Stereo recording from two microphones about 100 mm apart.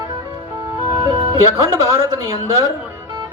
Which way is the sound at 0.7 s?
30° right (ahead or behind).